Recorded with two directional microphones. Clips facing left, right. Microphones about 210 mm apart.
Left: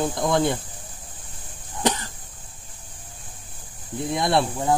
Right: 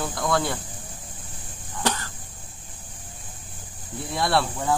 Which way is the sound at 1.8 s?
20° left (ahead or behind).